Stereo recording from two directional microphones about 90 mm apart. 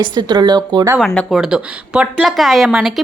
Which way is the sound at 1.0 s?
10° left (ahead or behind).